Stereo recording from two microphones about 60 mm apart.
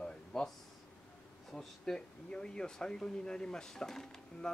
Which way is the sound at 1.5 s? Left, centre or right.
Centre.